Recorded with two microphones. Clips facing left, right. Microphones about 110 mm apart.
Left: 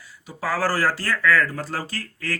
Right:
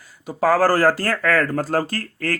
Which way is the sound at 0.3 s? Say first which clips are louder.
Right 8 dB; 45° right (ahead or behind).